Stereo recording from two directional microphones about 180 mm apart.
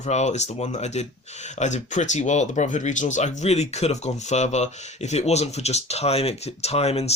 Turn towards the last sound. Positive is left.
turn(degrees=35)  # may be behind; listen again after turning